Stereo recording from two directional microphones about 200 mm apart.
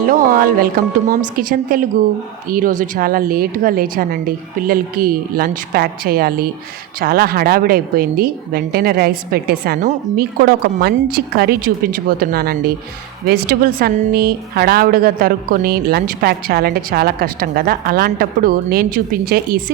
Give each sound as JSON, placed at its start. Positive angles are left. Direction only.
{"t": 0.1, "sound": "a woman's voice", "side_deg": -45}